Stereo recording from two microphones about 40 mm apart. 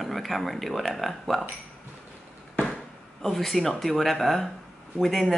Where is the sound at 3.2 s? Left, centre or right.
Centre.